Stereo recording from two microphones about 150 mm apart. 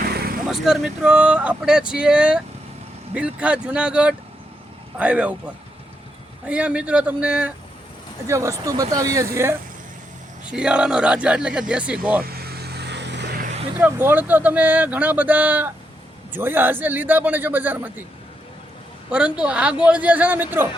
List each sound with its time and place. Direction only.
0.1 s vehicle: 90° right
0.4 s speech: 5° right (ahead or behind)
6.4 s speech: 10° right (ahead or behind)
8.3 s speech: 20° right (ahead or behind)
10.4 s speech: 5° right (ahead or behind)
12.2 s vehicle: 90° right
13.7 s speech: 10° right (ahead or behind)
19.1 s speech: 5° right (ahead or behind)